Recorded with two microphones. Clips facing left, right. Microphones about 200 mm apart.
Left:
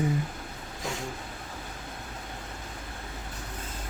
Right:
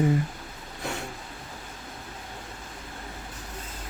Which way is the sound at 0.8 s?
65° right (ahead or behind).